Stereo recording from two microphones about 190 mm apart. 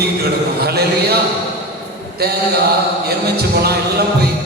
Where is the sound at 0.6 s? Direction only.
55° right (ahead or behind).